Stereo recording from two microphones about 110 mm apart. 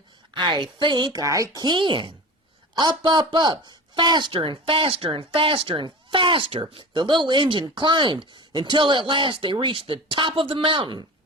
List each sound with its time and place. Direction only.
0.3 s speech: 45° right (ahead or behind)
1.2 s speech: 30° right (ahead or behind); by 11.0 s 50° right (ahead or behind)